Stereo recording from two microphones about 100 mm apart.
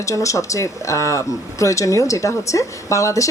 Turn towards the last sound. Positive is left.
turn(degrees=30)  # may be behind; listen again after turning